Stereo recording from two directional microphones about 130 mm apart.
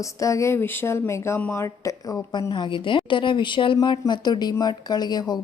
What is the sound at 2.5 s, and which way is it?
A woman's voice, 40° left (ahead or behind).